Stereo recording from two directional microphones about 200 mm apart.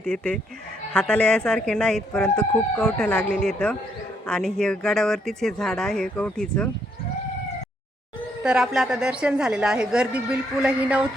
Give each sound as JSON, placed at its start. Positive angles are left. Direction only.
{"t": 0.9, "sound": "speech", "side_deg": 10}
{"t": 8.4, "sound": "speech", "side_deg": 0}